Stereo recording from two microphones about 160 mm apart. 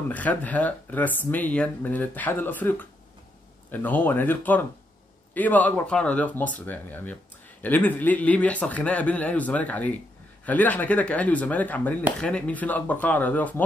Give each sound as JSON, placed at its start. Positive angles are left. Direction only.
{"t": 0.1, "sound": "speech", "side_deg": 10}